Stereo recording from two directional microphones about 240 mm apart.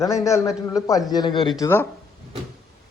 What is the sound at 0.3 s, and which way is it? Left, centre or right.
Speech, centre.